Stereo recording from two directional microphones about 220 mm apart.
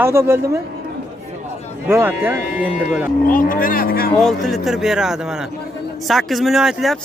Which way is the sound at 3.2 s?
40° left (ahead or behind).